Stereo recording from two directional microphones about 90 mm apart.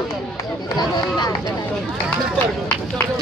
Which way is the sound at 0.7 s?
50° left (ahead or behind).